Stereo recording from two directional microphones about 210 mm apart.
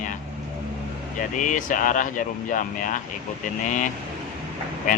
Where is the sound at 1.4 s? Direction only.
40° left (ahead or behind).